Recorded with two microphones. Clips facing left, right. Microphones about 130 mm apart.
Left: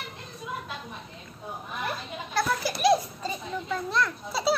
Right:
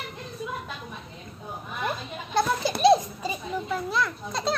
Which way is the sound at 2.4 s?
25° right (ahead or behind).